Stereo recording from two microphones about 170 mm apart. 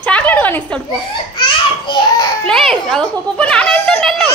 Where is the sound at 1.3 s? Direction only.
25° left (ahead or behind).